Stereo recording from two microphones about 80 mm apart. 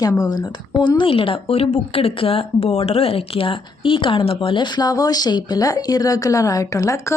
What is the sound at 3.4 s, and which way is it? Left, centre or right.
Speech, left.